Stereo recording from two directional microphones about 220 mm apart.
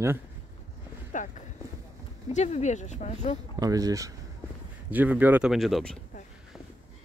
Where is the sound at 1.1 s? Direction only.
35° left (ahead or behind).